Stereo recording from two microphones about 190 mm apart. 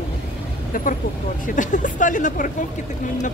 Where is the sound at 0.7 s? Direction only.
45° left (ahead or behind).